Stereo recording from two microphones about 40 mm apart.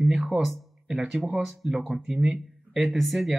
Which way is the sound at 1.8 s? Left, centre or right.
Right.